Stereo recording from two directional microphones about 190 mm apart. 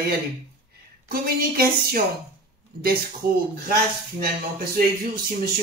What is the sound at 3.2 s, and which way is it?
A woman's voice, 55° right (ahead or behind).